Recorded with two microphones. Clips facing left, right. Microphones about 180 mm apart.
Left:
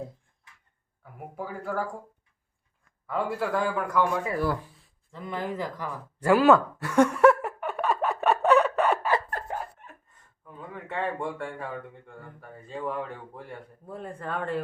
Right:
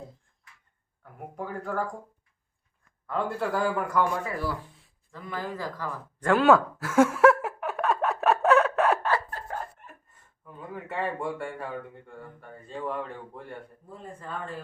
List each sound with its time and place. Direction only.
1.4 s speech: 5° left (ahead or behind)
3.1 s speech: centre (ahead or behind)
5.1 s a sound: 20° left (ahead or behind); by 9.0 s centre (ahead or behind)
10.4 s speech: centre (ahead or behind)
13.8 s speech: 65° left (ahead or behind)